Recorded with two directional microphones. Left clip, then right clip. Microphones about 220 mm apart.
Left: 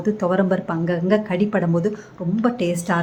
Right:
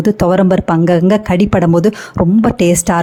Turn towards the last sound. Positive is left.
turn(degrees=-45)  # may be behind; listen again after turning